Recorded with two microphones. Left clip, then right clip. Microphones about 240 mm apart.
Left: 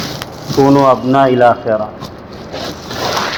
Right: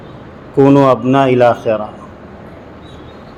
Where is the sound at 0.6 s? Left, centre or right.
Right.